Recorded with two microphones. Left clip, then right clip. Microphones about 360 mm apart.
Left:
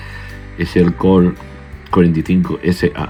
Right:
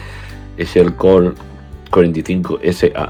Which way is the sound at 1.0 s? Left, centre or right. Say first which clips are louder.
Right 3 dB; right.